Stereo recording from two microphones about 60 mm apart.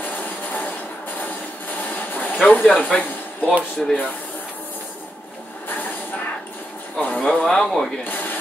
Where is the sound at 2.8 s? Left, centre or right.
Left.